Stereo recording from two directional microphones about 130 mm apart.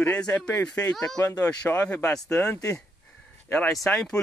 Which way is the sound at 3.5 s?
10° left (ahead or behind).